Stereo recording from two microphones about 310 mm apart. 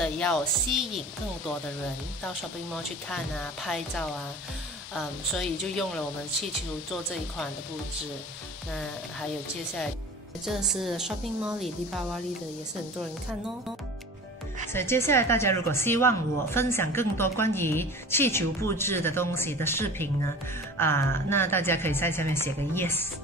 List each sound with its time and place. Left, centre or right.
0.0 s a woman's voice: centre
2.2 s a woman's voice: centre
10.4 s a woman's voice: centre
14.7 s speech: centre